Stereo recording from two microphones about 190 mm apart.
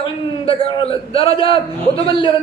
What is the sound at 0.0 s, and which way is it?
A man's voice, 30° left (ahead or behind).